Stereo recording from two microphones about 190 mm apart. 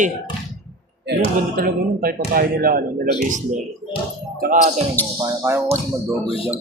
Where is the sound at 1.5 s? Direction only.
50° right (ahead or behind).